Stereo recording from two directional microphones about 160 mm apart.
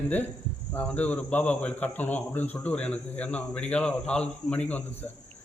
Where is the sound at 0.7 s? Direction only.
10° left (ahead or behind).